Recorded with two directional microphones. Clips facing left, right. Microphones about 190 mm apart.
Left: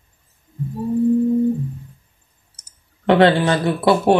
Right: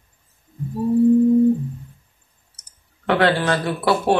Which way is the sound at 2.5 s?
20° left (ahead or behind).